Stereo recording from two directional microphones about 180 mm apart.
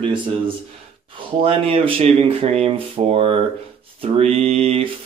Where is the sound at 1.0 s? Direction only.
30° right (ahead or behind).